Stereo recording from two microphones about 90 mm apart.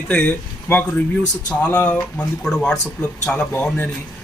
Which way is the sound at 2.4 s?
5° left (ahead or behind).